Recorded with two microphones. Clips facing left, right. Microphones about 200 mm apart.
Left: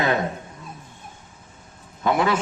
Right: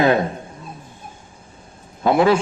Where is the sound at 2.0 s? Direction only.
30° right (ahead or behind).